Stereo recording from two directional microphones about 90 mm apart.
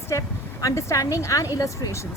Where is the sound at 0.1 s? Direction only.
35° left (ahead or behind).